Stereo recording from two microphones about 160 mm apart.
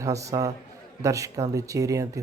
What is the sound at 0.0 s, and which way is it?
Speech, 20° right (ahead or behind).